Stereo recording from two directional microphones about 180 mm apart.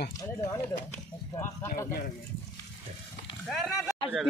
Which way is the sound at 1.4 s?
15° left (ahead or behind).